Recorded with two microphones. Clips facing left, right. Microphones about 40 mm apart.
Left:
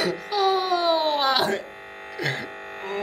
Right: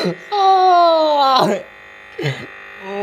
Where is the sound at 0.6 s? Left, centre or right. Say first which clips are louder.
Right 11 dB; right.